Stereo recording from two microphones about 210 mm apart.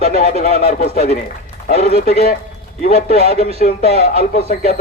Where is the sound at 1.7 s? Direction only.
30° right (ahead or behind).